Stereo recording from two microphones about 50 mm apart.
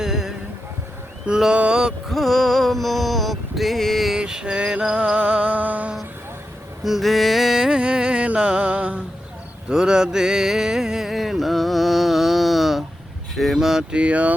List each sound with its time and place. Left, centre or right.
0.0 s music: centre
1.3 s speech: centre
2.0 s a sound: centre
4.2 s music: centre
6.8 s music: centre
13.3 s speech: centre
13.9 s speech: right